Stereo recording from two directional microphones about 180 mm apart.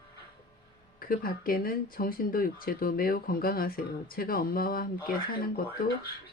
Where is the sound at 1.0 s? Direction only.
55° left (ahead or behind).